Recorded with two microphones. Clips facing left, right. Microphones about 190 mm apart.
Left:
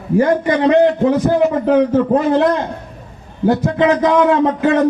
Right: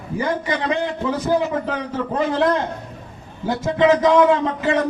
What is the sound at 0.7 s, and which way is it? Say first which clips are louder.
A man's voice: left 10 dB; 60° left (ahead or behind).